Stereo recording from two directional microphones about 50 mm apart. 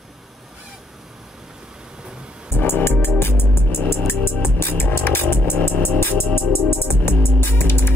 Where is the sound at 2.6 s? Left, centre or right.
Left.